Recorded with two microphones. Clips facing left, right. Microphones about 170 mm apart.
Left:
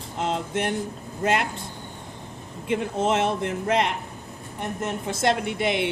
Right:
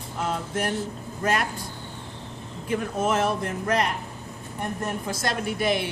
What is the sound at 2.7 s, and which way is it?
A woman's voice, 25° left (ahead or behind).